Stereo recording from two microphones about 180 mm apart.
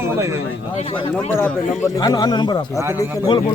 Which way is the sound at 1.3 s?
10° left (ahead or behind).